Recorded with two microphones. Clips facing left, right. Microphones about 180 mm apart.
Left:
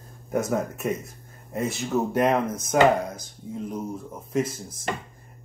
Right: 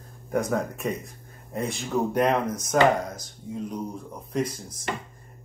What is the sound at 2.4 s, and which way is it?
Speech, 25° left (ahead or behind).